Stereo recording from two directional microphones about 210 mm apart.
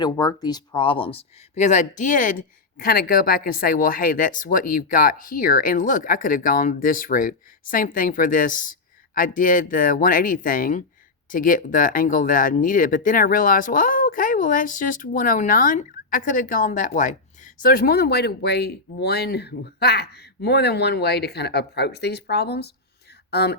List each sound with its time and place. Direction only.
0.0 s speech: 20° left (ahead or behind); by 23.6 s 50° left (ahead or behind)